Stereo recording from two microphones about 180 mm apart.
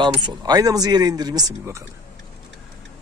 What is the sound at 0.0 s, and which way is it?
Speech, 25° right (ahead or behind).